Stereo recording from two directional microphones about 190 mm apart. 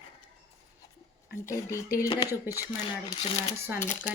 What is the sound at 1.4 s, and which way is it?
Speech, 15° left (ahead or behind).